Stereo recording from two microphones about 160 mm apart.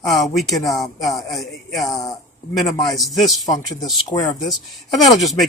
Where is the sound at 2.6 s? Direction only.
25° left (ahead or behind).